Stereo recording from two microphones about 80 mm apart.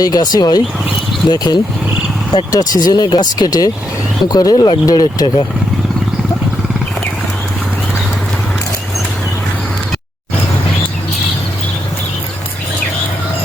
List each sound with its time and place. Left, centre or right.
0.0 s speech: left